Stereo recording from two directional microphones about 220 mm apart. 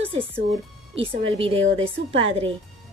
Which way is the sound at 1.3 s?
25° right (ahead or behind).